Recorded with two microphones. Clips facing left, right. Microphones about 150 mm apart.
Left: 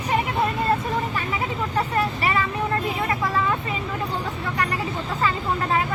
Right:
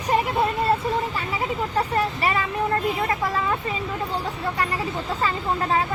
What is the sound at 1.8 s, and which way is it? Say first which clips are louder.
Vehicle: even; 40° right (ahead or behind).